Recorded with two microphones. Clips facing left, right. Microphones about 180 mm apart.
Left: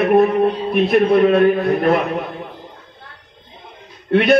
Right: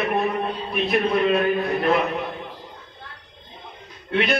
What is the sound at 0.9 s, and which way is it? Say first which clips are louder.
A man's voice: left 7 dB; 50° left (ahead or behind).